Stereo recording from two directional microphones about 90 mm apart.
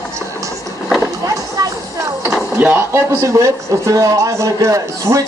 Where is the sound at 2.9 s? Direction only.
35° right (ahead or behind).